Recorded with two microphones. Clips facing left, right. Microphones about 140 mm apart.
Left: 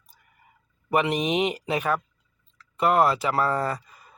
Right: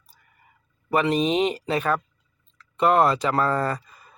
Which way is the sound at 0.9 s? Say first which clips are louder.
Right 2 dB; 15° left (ahead or behind).